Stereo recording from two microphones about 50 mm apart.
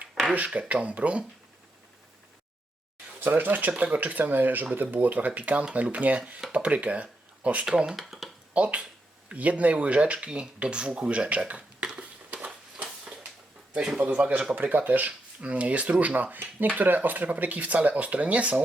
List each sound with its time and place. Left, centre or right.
0.1 s a sound: centre
0.3 s speech: right
3.2 s speech: right
7.6 s speech: centre
7.9 s speech: centre
8.5 s speech: right
11.4 s a sound: right
12.5 s a sound: centre
13.7 s speech: right